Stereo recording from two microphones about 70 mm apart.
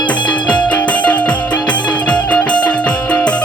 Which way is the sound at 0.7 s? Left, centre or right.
Centre.